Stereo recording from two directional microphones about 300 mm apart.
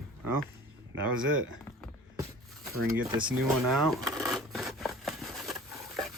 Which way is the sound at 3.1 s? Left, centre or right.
Centre.